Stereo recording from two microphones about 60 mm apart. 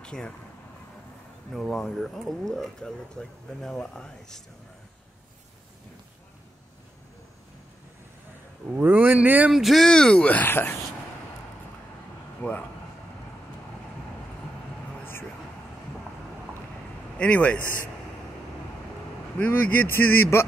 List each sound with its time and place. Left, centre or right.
0.0 s speech: centre
1.5 s speech: centre
8.8 s speech: right
9.5 s speech: centre
9.8 s speech: centre
10.5 s speech: left
12.4 s a man's voice: left
17.2 s a man's voice: left
19.3 s speech: left